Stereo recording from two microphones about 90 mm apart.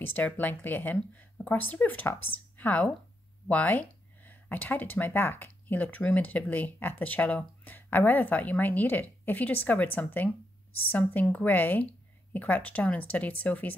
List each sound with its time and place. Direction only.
0.0 s speech: 20° left (ahead or behind)